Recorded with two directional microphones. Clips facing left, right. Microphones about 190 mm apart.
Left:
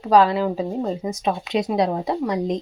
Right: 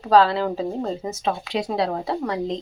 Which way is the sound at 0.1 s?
15° left (ahead or behind).